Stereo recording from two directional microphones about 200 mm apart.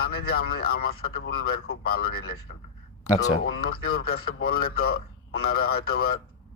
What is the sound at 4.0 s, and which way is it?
Speech, 50° left (ahead or behind).